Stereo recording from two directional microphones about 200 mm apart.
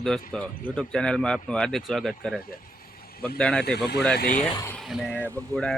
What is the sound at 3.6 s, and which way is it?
Speech, 55° left (ahead or behind).